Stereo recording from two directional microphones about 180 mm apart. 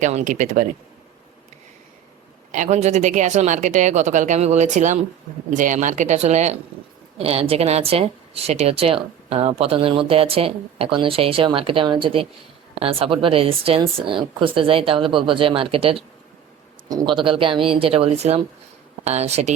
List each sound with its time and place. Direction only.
0.0 s speech: 40° right (ahead or behind)
2.5 s speech: 40° right (ahead or behind)